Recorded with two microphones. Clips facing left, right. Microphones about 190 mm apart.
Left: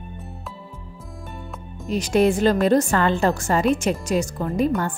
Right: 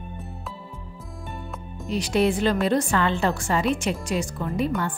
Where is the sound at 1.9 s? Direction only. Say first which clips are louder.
Left 3 dB; 45° left (ahead or behind).